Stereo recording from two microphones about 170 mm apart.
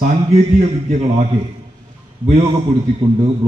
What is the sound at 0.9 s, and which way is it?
Speech, 40° right (ahead or behind).